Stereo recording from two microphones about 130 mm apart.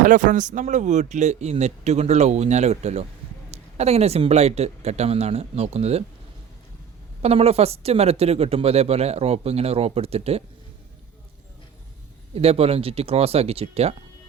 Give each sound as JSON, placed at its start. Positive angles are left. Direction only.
{"t": 0.0, "sound": "speech", "side_deg": -75}
{"t": 7.2, "sound": "speech", "side_deg": -55}
{"t": 12.3, "sound": "speech", "side_deg": -50}